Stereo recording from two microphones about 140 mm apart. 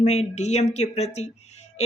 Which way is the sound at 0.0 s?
50° left (ahead or behind).